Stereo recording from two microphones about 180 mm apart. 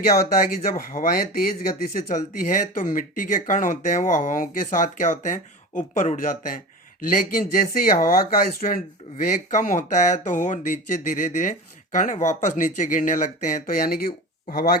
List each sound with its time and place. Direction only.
0.1 s speech: 50° left (ahead or behind)